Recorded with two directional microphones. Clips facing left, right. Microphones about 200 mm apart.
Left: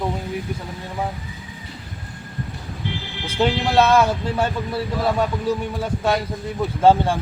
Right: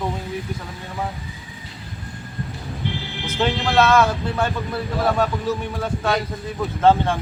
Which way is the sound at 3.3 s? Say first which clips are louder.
Left 2 dB; 10° left (ahead or behind).